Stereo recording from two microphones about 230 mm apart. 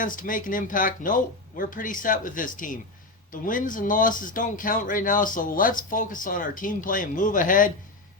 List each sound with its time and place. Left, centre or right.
0.0 s speech: left